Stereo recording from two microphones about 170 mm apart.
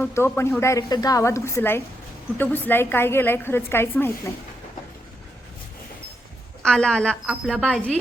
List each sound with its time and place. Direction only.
0.0 s a woman's voice: 10° left (ahead or behind)
6.6 s a woman's voice: 5° left (ahead or behind)